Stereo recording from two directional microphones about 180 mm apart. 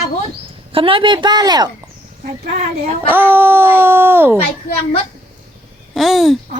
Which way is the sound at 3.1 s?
10° right (ahead or behind).